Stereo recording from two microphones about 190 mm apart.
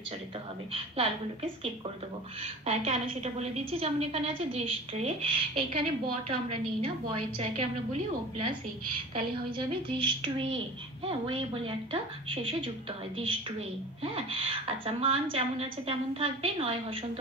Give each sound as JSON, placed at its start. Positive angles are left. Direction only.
{"t": 0.7, "sound": "a woman's voice", "side_deg": -30}
{"t": 6.8, "sound": "a woman's voice", "side_deg": -30}
{"t": 9.8, "sound": "a woman's voice", "side_deg": -25}